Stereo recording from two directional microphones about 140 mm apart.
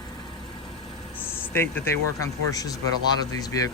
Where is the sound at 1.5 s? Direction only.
15° left (ahead or behind).